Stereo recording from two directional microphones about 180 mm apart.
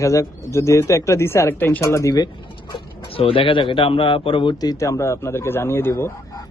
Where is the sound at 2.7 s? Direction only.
30° left (ahead or behind).